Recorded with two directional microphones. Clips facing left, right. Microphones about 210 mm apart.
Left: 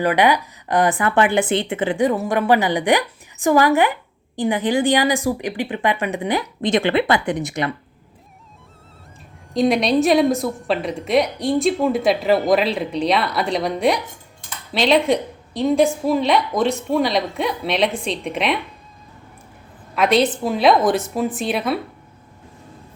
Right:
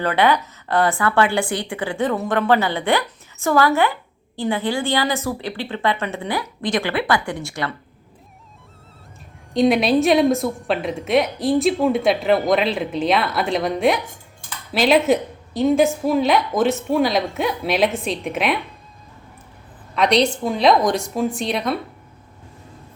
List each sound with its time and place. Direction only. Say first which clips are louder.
0.0 s speech: left 1 dB; 15° left (ahead or behind)
9.5 s a woman's voice: right 1 dB; centre (ahead or behind)
20.0 s a woman's voice: left 1 dB; 5° left (ahead or behind)